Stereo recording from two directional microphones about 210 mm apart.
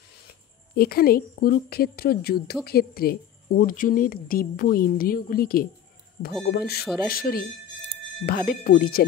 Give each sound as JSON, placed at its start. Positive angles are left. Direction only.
{"t": 0.7, "sound": "a woman's voice", "side_deg": 45}
{"t": 6.8, "sound": "speech", "side_deg": 0}
{"t": 7.1, "sound": "a woman's voice", "side_deg": 45}
{"t": 8.5, "sound": "a woman's voice", "side_deg": 45}